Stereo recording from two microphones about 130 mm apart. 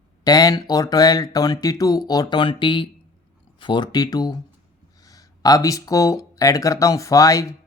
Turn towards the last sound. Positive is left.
turn(degrees=25)  # may be behind; listen again after turning